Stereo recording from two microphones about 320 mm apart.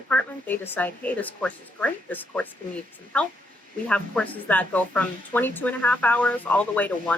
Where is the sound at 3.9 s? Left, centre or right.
Centre.